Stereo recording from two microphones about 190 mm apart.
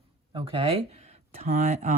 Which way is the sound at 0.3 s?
30° right (ahead or behind).